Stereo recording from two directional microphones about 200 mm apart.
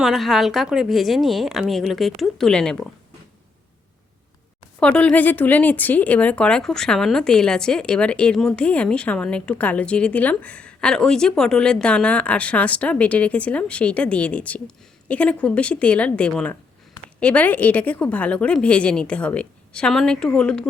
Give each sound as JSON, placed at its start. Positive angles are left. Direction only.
{"t": 0.0, "sound": "a woman's voice", "side_deg": 0}
{"t": 4.8, "sound": "a woman's voice", "side_deg": 5}